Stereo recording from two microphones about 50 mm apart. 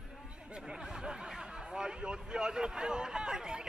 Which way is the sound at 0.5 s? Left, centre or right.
Centre.